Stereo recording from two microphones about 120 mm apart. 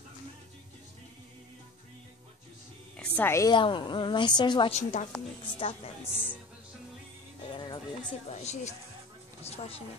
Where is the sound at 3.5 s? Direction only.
40° left (ahead or behind).